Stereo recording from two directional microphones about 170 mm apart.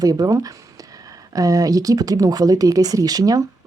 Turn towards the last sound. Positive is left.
turn(degrees=-20)  # may be behind; listen again after turning